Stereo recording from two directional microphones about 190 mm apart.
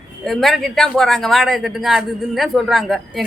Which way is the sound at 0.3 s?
Centre (ahead or behind).